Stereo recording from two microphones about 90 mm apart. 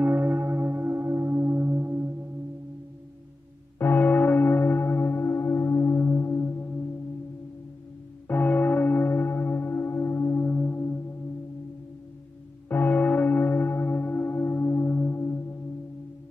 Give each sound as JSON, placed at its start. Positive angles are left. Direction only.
{"t": 0.0, "sound": "singing bowl", "side_deg": -20}
{"t": 3.7, "sound": "church bell", "side_deg": 20}
{"t": 8.3, "sound": "church bell", "side_deg": 20}
{"t": 12.6, "sound": "church bell", "side_deg": 20}